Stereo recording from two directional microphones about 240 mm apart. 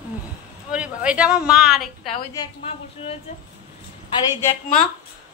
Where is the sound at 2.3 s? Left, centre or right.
Left.